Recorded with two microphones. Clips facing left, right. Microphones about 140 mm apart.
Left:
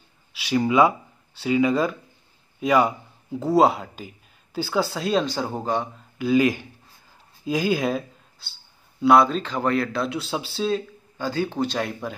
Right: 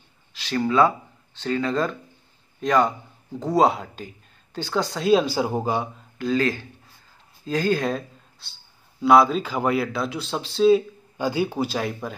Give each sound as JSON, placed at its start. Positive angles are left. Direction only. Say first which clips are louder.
{"t": 0.3, "sound": "speech", "louder": "left 2 dB", "side_deg": 10}
{"t": 6.1, "sound": "speech", "louder": "left 3 dB", "side_deg": 10}
{"t": 11.1, "sound": "speech", "louder": "right 1 dB", "side_deg": -10}